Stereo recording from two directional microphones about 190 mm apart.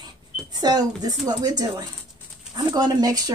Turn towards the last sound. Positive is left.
turn(degrees=-20)  # may be behind; listen again after turning